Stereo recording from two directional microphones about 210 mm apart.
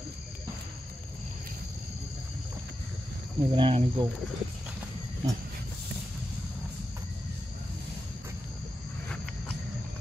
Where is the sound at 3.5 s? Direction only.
25° right (ahead or behind).